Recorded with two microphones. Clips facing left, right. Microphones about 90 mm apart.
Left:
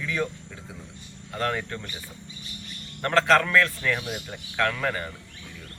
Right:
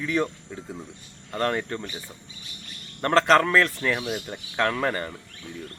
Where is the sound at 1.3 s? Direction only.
40° right (ahead or behind).